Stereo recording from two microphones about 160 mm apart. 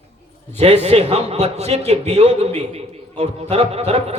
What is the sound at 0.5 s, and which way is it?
A man's voice, 40° right (ahead or behind).